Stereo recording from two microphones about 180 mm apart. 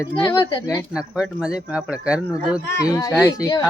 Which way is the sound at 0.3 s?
25° left (ahead or behind).